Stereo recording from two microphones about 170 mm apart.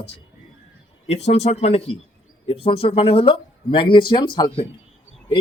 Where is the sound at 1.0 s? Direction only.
40° left (ahead or behind).